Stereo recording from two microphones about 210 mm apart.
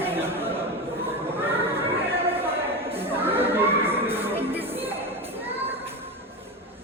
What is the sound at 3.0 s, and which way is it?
Neigh, 10° right (ahead or behind).